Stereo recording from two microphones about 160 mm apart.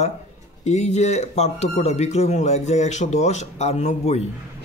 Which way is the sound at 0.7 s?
45° left (ahead or behind).